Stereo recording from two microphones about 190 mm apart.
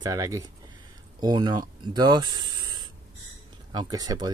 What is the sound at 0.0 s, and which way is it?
Speech, 20° right (ahead or behind).